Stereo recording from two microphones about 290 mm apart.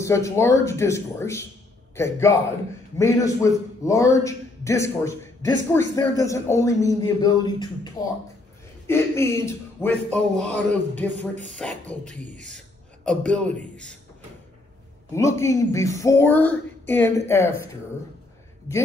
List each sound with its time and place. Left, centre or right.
0.0 s a man's voice: centre
11.1 s speech: right
11.5 s a man's voice: centre
15.1 s a man's voice: centre